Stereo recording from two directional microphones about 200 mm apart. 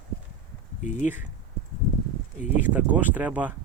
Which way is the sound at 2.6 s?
10° right (ahead or behind).